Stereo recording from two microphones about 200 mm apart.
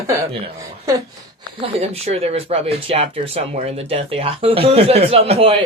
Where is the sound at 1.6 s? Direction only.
30° right (ahead or behind).